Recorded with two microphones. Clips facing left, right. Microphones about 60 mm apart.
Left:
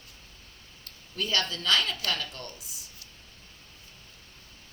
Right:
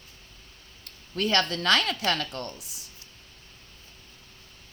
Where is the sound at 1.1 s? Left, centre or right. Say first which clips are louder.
Right 5 dB; right.